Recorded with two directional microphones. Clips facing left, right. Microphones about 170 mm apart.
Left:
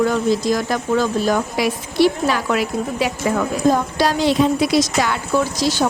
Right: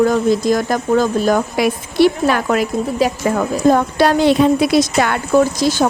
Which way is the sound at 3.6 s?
60° right (ahead or behind).